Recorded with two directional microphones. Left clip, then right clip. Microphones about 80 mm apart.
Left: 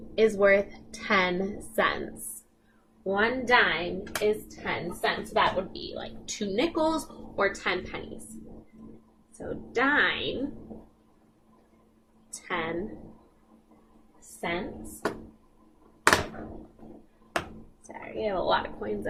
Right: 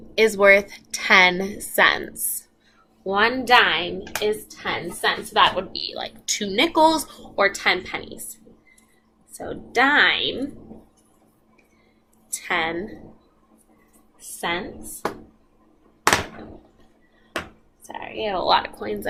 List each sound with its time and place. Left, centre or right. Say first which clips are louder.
0.2 s speech: right 7 dB; right
3.1 s a woman's voice: right 7 dB; centre
9.5 s speech: right 7 dB; right
12.5 s speech: right 8 dB; right
14.4 s speech: right 6 dB; centre
17.4 s a sound: right 4 dB; centre
18.5 s speech: right 7 dB; right